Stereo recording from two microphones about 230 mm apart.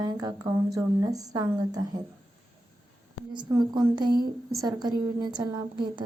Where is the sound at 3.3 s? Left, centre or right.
Centre.